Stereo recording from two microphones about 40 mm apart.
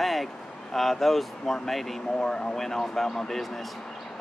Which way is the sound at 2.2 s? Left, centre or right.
Left.